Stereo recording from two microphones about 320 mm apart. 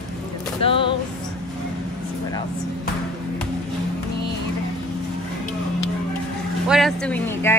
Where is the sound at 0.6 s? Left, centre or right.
Centre.